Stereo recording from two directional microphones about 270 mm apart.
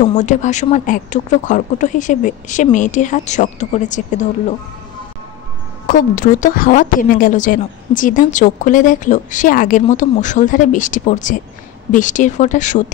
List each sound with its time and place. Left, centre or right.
0.0 s a woman's voice: left
5.9 s a woman's voice: left